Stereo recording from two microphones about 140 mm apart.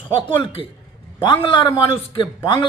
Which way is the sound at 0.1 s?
40° left (ahead or behind).